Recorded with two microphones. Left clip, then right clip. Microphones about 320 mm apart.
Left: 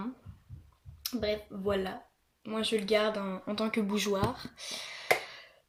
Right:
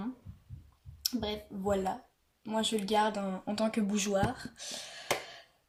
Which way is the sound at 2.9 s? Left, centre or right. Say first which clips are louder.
Left 1 dB; centre.